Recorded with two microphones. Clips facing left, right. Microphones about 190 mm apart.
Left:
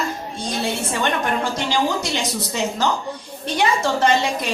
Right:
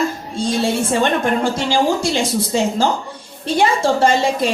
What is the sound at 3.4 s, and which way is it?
Speech, 30° right (ahead or behind).